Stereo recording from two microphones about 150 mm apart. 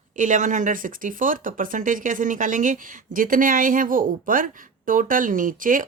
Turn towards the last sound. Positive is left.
turn(degrees=-65)  # may be behind; listen again after turning